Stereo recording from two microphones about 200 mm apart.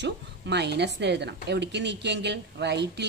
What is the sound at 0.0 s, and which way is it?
A woman's voice, 55° right (ahead or behind).